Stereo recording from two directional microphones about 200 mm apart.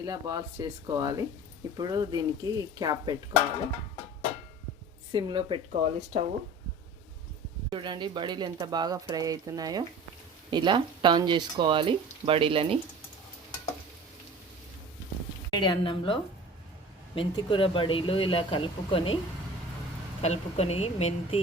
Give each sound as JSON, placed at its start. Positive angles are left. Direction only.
{"t": 0.0, "sound": "speech", "side_deg": -20}
{"t": 5.1, "sound": "speech", "side_deg": -25}
{"t": 7.7, "sound": "speech", "side_deg": -25}
{"t": 15.4, "sound": "speech", "side_deg": 20}
{"t": 20.2, "sound": "speech", "side_deg": 30}